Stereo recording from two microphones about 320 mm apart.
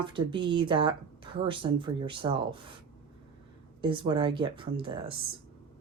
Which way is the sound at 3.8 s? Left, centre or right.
Centre.